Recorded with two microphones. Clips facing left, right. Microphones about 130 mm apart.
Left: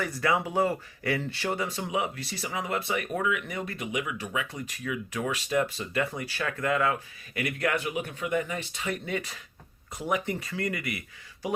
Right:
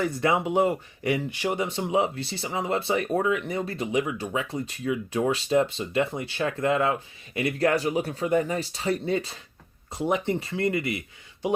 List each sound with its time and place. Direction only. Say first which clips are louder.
0.0 s speech: right 3 dB; 25° right (ahead or behind)